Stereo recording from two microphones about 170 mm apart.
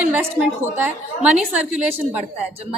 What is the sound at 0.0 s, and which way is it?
Speech, 10° right (ahead or behind).